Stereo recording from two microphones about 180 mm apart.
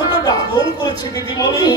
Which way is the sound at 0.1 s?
20° left (ahead or behind).